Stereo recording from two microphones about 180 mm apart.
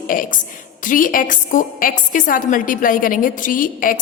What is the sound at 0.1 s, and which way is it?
A woman's voice, 50° left (ahead or behind).